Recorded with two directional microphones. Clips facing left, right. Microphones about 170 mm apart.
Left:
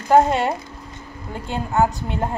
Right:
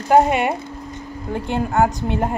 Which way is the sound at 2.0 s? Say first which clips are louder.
Right 4 dB; 15° right (ahead or behind).